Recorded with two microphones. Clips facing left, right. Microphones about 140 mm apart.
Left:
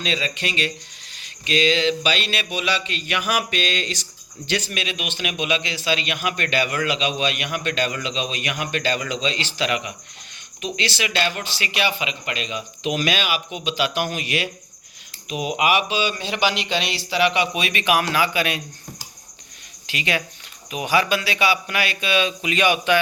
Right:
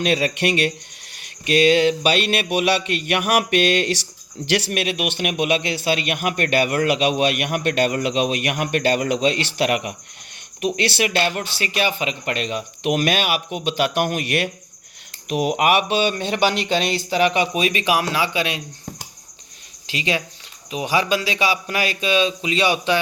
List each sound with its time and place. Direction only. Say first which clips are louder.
0.0 s a man's voice: right 7 dB; 60° right (ahead or behind); by 18.6 s 25° right (ahead or behind)
19.9 s a man's voice: right 2 dB; 30° right (ahead or behind)